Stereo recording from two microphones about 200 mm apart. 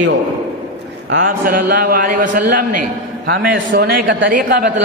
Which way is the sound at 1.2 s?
45° right (ahead or behind).